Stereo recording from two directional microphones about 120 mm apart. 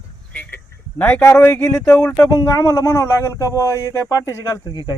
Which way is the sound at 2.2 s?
30° left (ahead or behind).